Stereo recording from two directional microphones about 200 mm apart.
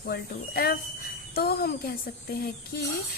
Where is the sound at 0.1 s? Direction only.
50° left (ahead or behind).